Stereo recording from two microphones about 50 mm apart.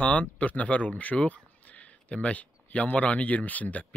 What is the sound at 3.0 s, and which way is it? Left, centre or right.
Speech, left.